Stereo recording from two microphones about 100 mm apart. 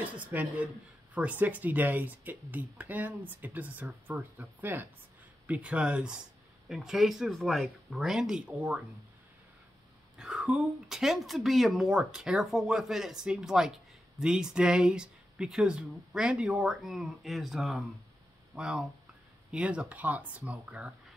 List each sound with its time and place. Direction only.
0.0 s a woman's voice: 15° right (ahead or behind)
10.1 s speech: 5° right (ahead or behind)